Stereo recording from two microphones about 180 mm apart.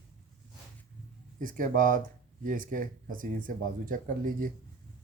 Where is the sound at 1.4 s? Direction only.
45° right (ahead or behind).